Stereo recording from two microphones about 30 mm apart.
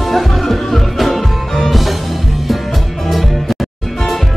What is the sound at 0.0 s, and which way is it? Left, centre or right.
Music, centre.